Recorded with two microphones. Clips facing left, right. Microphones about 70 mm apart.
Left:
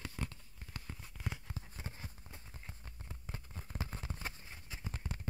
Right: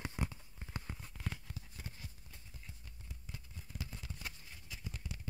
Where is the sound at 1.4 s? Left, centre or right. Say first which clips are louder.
Left 3 dB; left.